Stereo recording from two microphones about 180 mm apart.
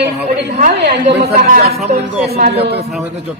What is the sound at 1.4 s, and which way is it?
A man's voice, 50° right (ahead or behind).